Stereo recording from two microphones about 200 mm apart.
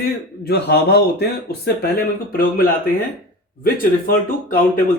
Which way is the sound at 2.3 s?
45° left (ahead or behind).